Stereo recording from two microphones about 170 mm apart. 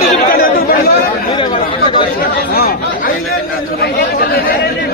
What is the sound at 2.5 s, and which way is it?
Speech, 65° left (ahead or behind).